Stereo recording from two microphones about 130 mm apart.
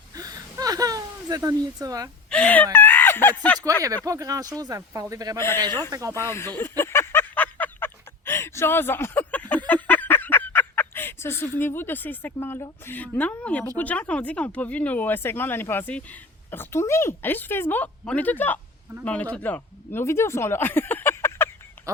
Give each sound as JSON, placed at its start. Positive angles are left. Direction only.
{"t": 0.1, "sound": "whimper", "side_deg": -30}
{"t": 2.3, "sound": "speech", "side_deg": 10}
{"t": 3.8, "sound": "speech", "side_deg": -25}
{"t": 5.4, "sound": "a man's voice", "side_deg": 20}
{"t": 5.9, "sound": "speech", "side_deg": -25}
{"t": 6.1, "sound": "a sound", "side_deg": 20}
{"t": 12.8, "sound": "speech", "side_deg": 15}